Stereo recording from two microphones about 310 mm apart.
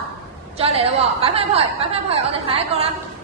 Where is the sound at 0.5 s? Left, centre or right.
Centre.